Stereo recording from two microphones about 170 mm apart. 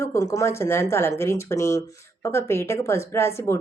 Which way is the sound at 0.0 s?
20° left (ahead or behind).